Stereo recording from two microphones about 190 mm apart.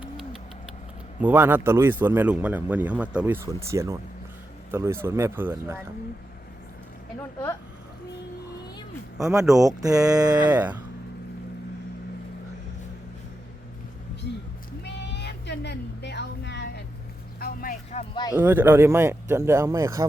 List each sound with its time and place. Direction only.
1.2 s speech: 10° right (ahead or behind)
9.6 s speech: 20° right (ahead or behind)
10.5 s speech: 10° right (ahead or behind)
14.8 s a sound: 65° left (ahead or behind)
17.4 s vehicle: 45° left (ahead or behind)
18.1 s speech: 20° left (ahead or behind)
18.3 s speech: 10° right (ahead or behind)